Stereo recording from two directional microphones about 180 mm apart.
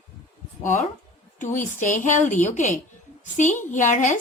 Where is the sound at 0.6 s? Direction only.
45° left (ahead or behind).